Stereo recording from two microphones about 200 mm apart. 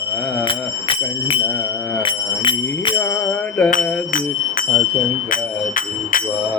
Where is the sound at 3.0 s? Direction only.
5° left (ahead or behind).